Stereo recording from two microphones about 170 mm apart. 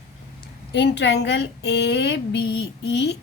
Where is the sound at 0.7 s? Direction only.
90° left.